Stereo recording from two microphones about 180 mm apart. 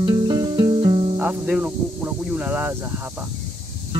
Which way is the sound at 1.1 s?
10° right (ahead or behind).